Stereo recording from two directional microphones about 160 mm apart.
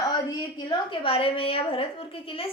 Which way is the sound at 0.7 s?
35° left (ahead or behind).